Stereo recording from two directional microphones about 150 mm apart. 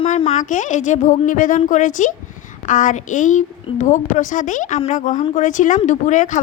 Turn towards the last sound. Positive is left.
turn(degrees=55)  # may be behind; listen again after turning